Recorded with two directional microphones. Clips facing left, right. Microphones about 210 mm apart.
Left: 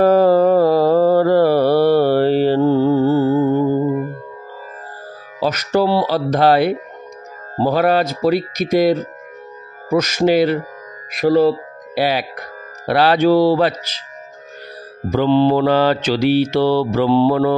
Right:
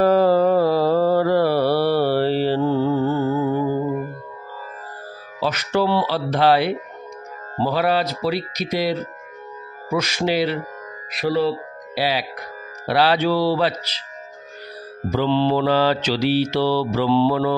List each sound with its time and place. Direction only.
0.0 s mantra: 45° left (ahead or behind); by 3.8 s 25° left (ahead or behind)
5.4 s speech: 40° left (ahead or behind)
7.5 s mantra: 45° left (ahead or behind)
11.1 s speech: 45° left (ahead or behind)
12.8 s mantra: 50° left (ahead or behind)
15.0 s mantra: 50° left (ahead or behind)